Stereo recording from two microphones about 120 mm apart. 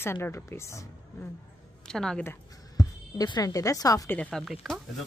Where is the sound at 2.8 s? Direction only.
30° left (ahead or behind).